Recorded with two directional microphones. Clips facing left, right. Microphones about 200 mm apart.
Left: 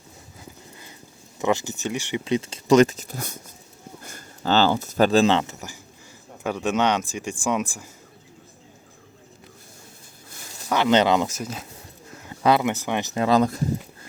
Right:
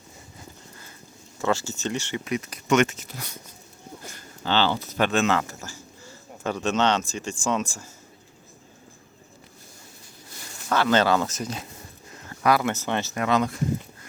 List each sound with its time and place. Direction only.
1.4 s speech: 15° left (ahead or behind)
2.2 s speech: 30° left (ahead or behind)
10.7 s speech: 20° left (ahead or behind)
12.1 s a sound: 10° left (ahead or behind)
12.4 s speech: 25° left (ahead or behind)
13.2 s speech: 35° left (ahead or behind)